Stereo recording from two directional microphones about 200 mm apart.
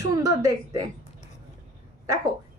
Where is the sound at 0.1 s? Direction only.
15° right (ahead or behind).